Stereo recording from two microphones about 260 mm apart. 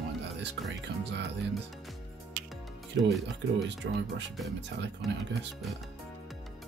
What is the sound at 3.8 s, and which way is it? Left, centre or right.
Speech, right.